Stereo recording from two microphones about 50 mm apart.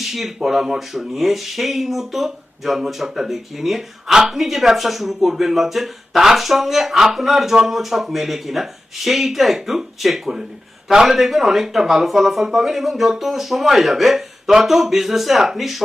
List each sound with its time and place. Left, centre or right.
0.0 s speech: centre